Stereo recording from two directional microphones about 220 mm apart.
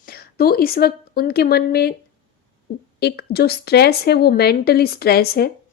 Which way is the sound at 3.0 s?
45° left (ahead or behind).